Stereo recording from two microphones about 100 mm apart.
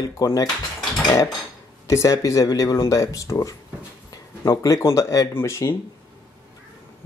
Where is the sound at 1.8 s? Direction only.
30° left (ahead or behind).